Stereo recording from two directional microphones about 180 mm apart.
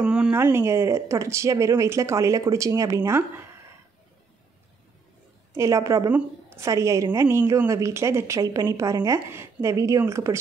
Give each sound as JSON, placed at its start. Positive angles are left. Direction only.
{"t": 0.0, "sound": "a woman's voice", "side_deg": -5}
{"t": 5.5, "sound": "a woman's voice", "side_deg": -15}